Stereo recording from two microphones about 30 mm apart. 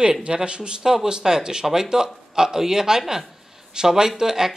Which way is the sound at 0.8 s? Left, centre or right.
Centre.